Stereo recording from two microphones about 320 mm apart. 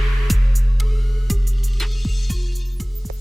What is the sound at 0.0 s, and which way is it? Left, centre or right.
Music, centre.